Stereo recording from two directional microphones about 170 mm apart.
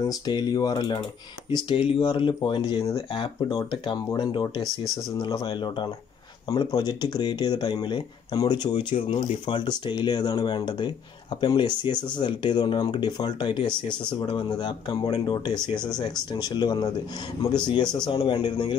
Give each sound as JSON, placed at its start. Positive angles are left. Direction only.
{"t": 0.0, "sound": "speech", "side_deg": 20}
{"t": 2.7, "sound": "speech", "side_deg": 20}
{"t": 3.1, "sound": "speech", "side_deg": 30}